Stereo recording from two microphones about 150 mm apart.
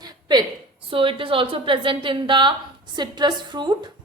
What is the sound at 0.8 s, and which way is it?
A woman's voice, 35° right (ahead or behind).